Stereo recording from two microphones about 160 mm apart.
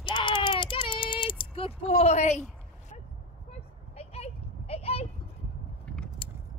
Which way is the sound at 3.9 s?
40° left (ahead or behind).